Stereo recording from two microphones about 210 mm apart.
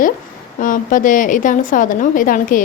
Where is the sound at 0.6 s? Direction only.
40° left (ahead or behind).